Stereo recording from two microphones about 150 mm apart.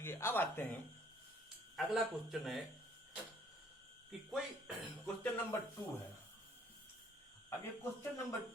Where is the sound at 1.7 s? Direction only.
Centre (ahead or behind).